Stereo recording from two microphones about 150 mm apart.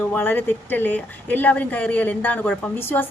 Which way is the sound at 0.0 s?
10° left (ahead or behind).